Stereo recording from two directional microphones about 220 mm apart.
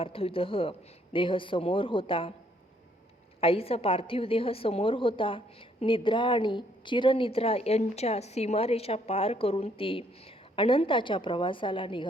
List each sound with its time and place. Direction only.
0.0 s a woman's voice: 25° left (ahead or behind)
3.4 s a woman's voice: 25° left (ahead or behind)